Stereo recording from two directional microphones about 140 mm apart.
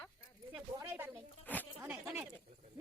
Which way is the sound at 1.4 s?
10° left (ahead or behind).